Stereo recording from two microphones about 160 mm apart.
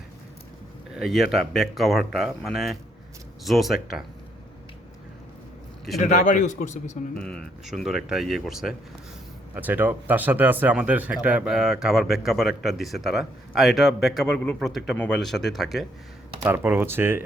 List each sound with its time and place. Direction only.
0.9 s a man's voice: centre (ahead or behind)
6.0 s a man's voice: 50° left (ahead or behind)
7.2 s a man's voice: 5° left (ahead or behind)
16.5 s speech: 15° right (ahead or behind)